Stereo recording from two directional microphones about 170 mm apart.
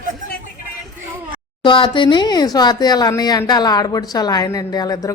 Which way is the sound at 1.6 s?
30° left (ahead or behind).